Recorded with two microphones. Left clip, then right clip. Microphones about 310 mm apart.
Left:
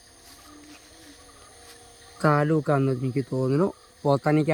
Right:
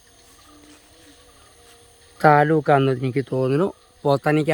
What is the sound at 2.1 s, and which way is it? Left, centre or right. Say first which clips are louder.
Speech: right 8 dB; centre.